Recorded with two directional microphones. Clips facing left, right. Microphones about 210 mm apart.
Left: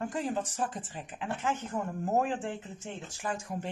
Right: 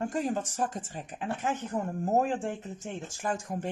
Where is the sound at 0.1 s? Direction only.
45° right (ahead or behind).